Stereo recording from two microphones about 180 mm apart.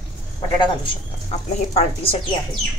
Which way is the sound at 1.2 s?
35° left (ahead or behind).